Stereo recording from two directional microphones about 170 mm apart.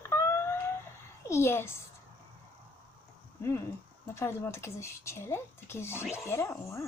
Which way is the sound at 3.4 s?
15° left (ahead or behind).